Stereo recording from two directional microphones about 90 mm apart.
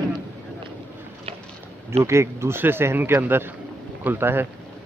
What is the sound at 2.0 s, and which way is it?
Speech, 30° right (ahead or behind).